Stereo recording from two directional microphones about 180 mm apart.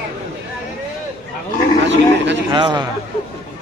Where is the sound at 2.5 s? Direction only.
25° right (ahead or behind).